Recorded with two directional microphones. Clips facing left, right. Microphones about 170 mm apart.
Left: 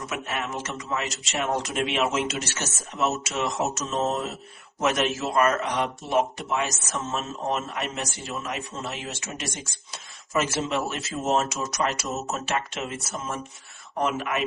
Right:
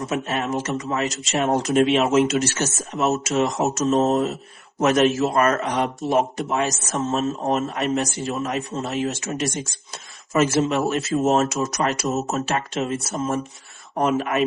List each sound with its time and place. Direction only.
0.0 s a man's voice: 35° right (ahead or behind)